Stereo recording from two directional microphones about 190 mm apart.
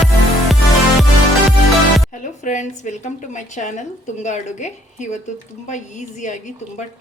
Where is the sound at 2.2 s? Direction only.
40° left (ahead or behind).